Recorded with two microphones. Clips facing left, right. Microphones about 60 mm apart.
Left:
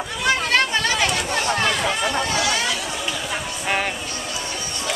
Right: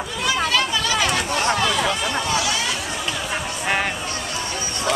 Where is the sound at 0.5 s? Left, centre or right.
Left.